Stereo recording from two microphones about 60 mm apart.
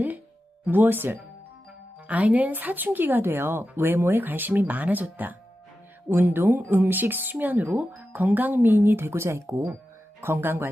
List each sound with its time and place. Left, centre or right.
0.6 s speech: right
2.0 s speech: right